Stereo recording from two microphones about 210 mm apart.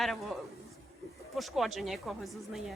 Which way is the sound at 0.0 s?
Centre (ahead or behind).